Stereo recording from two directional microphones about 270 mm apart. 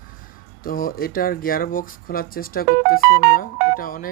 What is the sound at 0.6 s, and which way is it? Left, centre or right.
Speech, left.